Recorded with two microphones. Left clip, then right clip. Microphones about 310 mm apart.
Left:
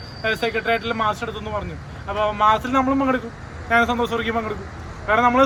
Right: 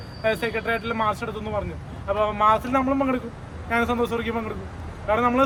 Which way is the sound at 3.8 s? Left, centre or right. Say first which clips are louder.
Left 3 dB; centre.